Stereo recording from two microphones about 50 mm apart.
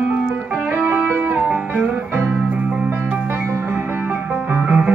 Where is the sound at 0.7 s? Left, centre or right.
Right.